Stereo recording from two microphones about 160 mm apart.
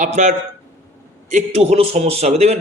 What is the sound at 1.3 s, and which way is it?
A man's voice, 45° right (ahead or behind).